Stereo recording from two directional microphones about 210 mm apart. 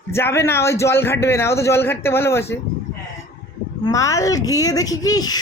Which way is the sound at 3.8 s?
15° left (ahead or behind).